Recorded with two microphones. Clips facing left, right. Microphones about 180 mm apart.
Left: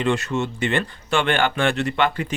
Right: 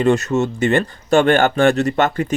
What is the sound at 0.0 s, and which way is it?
Speech, 45° right (ahead or behind).